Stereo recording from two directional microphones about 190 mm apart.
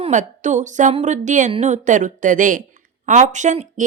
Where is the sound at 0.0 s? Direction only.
40° right (ahead or behind).